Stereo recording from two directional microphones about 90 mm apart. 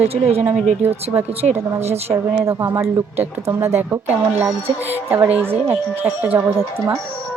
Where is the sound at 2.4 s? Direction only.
30° right (ahead or behind).